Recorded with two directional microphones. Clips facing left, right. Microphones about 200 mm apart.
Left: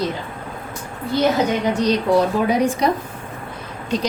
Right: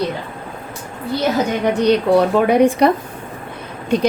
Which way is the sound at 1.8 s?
60° right (ahead or behind).